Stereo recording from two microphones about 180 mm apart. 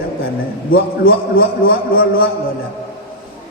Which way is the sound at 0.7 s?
55° left (ahead or behind).